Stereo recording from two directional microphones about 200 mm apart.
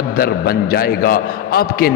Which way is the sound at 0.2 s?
50° left (ahead or behind).